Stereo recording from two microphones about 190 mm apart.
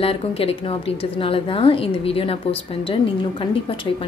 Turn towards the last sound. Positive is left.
turn(degrees=30)  # may be behind; listen again after turning